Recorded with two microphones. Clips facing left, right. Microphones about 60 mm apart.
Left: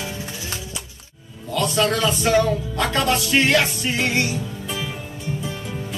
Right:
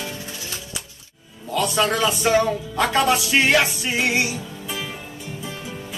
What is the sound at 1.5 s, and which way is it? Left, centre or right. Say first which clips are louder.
Speech: even; centre.